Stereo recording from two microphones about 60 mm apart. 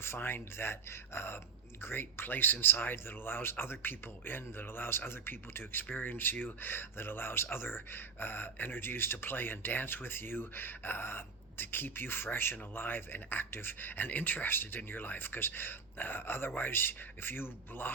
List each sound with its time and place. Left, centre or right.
0.0 s speech: left